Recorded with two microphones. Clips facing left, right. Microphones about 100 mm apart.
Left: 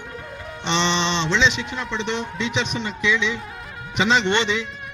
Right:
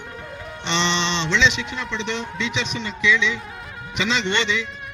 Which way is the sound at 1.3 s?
40° left (ahead or behind).